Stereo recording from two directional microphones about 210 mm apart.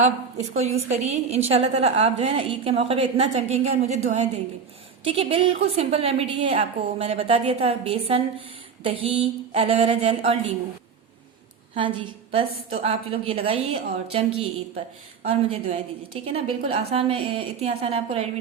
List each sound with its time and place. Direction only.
0.0 s a woman's voice: 30° right (ahead or behind)
11.7 s a woman's voice: 25° right (ahead or behind)